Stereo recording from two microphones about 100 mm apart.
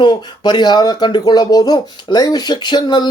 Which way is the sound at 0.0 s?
50° left (ahead or behind).